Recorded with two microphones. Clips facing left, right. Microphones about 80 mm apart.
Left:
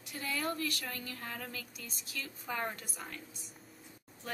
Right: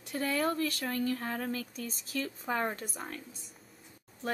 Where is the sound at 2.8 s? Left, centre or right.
Right.